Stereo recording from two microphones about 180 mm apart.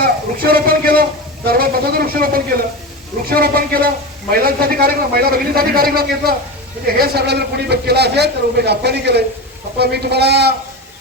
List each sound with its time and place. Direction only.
0.0 s a man's voice: 55° right (ahead or behind)